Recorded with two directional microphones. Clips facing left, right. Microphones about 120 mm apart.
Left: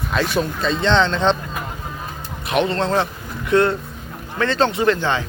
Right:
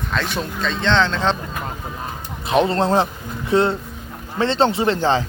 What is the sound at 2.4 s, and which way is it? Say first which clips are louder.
Speech: right 2 dB; 30° right (ahead or behind).